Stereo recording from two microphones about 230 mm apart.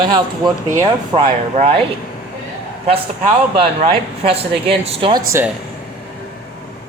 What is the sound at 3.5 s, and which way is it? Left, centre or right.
Speech, right.